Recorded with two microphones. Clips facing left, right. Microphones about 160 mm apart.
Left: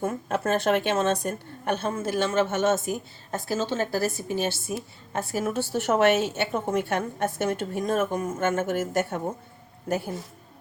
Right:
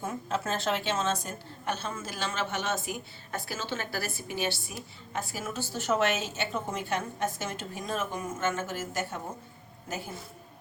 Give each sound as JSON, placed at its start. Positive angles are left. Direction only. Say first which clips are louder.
{"t": 0.0, "sound": "a woman's voice", "louder": "left 6 dB", "side_deg": 55}
{"t": 5.1, "sound": "a woman's voice", "louder": "left 8 dB", "side_deg": 60}